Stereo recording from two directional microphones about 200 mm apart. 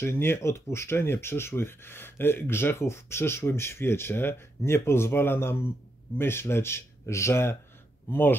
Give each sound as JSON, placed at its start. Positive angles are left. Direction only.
{"t": 0.0, "sound": "speech", "side_deg": 10}